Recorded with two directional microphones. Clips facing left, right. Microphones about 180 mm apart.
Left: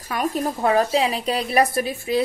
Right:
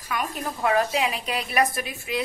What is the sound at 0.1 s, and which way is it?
A woman's voice, 35° left (ahead or behind).